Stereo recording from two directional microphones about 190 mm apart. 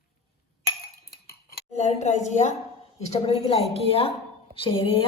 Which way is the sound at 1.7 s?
35° left (ahead or behind).